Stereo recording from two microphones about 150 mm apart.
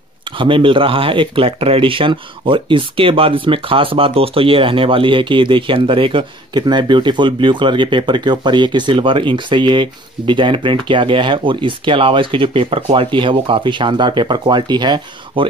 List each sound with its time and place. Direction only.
0.4 s speech: 35° right (ahead or behind)